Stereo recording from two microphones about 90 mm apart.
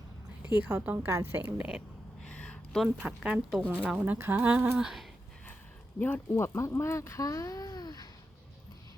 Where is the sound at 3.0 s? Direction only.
15° right (ahead or behind).